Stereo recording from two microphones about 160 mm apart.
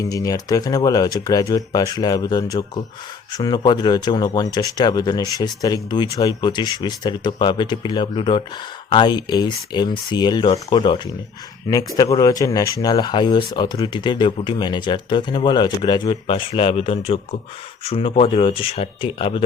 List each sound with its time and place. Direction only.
0.0 s speech: 20° left (ahead or behind)